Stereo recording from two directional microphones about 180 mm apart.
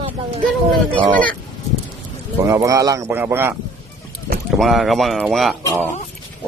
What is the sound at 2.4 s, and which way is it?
Speech, 20° right (ahead or behind).